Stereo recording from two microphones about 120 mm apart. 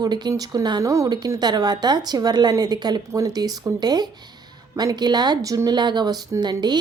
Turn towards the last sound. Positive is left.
turn(degrees=-35)  # may be behind; listen again after turning